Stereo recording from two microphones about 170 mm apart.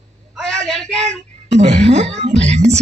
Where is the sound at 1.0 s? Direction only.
40° right (ahead or behind).